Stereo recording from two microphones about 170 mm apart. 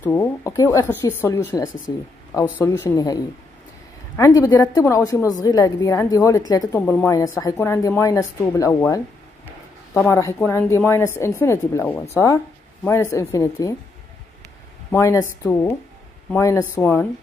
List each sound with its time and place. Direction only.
0.0 s speech: 15° left (ahead or behind)
4.2 s a woman's voice: 20° left (ahead or behind)
14.9 s speech: 15° left (ahead or behind)